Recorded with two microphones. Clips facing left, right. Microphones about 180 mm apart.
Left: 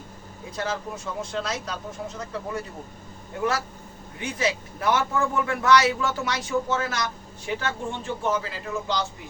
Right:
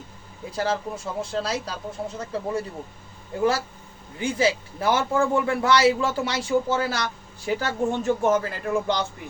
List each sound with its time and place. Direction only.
0.5 s speech: 30° right (ahead or behind)
4.2 s a man's voice: 30° right (ahead or behind); by 9.0 s 55° right (ahead or behind)